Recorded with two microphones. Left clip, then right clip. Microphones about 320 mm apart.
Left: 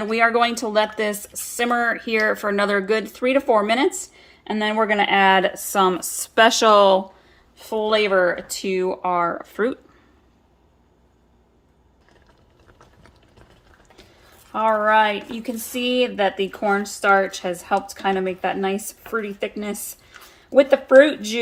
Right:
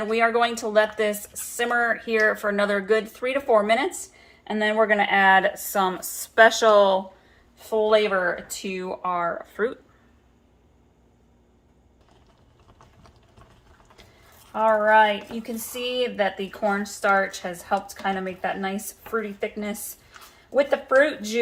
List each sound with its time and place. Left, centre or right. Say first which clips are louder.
0.0 s a woman's voice: left 3 dB; left
14.5 s a woman's voice: left 1 dB; left
16.2 s a woman's voice: left 4 dB; left